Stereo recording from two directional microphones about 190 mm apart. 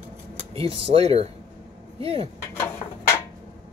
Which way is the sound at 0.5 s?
30° right (ahead or behind).